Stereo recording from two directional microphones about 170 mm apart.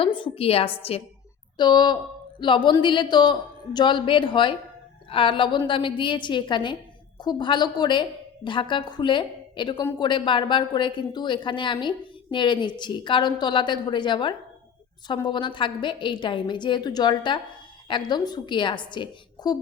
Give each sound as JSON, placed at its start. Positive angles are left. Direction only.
{"t": 0.0, "sound": "a woman's voice", "side_deg": 30}